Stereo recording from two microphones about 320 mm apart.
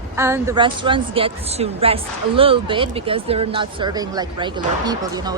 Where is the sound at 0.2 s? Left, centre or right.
Centre.